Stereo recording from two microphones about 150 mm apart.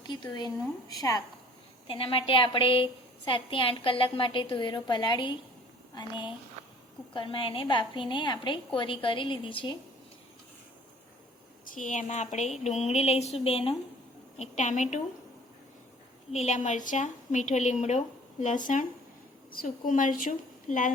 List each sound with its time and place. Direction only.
0.1 s a woman's voice: 30° left (ahead or behind)
1.9 s a woman's voice: 35° left (ahead or behind)
11.6 s a woman's voice: 60° left (ahead or behind)
16.3 s a woman's voice: 50° left (ahead or behind)
19.5 s a woman's voice: 70° left (ahead or behind)